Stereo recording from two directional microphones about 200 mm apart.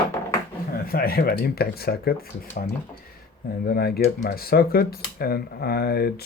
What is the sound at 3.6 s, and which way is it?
Speech, 50° left (ahead or behind).